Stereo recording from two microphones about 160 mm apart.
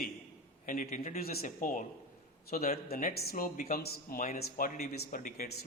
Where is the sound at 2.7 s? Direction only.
65° left (ahead or behind).